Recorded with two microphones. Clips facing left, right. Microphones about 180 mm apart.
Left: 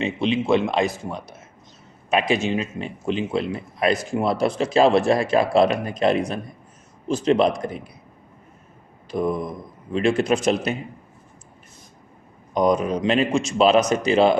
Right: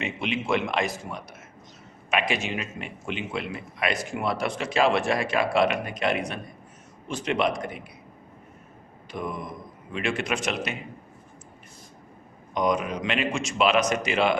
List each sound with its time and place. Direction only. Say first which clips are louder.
0.0 s a man's voice: left 7 dB; 30° left (ahead or behind)
9.1 s a man's voice: left 9 dB; 35° left (ahead or behind)
12.5 s a man's voice: left 6 dB; 35° left (ahead or behind)